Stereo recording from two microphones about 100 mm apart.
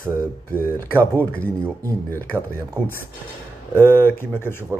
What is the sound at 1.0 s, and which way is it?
Speech, 20° left (ahead or behind).